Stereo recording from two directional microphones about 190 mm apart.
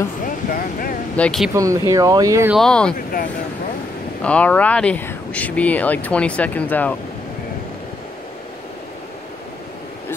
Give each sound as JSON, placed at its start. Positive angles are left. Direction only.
{"t": 0.3, "sound": "vehicle", "side_deg": 45}
{"t": 1.1, "sound": "speech", "side_deg": 5}
{"t": 1.5, "sound": "speech", "side_deg": -15}
{"t": 2.5, "sound": "speech", "side_deg": 5}
{"t": 4.2, "sound": "speech", "side_deg": 5}